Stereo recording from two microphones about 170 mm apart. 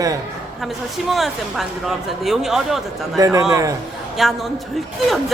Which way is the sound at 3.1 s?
20° right (ahead or behind).